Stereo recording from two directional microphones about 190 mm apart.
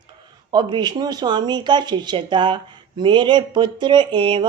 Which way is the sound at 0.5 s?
20° right (ahead or behind).